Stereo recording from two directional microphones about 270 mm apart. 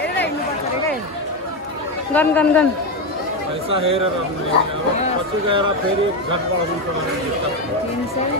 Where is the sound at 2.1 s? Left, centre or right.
Centre.